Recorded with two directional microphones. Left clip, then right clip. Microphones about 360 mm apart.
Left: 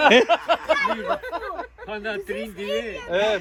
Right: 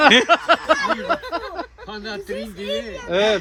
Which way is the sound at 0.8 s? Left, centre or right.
Right.